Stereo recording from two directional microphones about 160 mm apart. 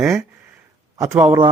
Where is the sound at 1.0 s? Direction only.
20° right (ahead or behind).